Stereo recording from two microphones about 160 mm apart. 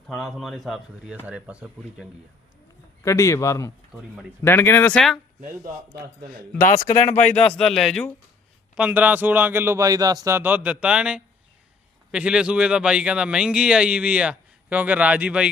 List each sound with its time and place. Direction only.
0.1 s speech: centre (ahead or behind)
3.0 s speech: 20° left (ahead or behind); by 5.2 s centre (ahead or behind)
6.6 s speech: 55° left (ahead or behind)
7.3 s speech: 5° left (ahead or behind)
8.7 s speech: 10° right (ahead or behind)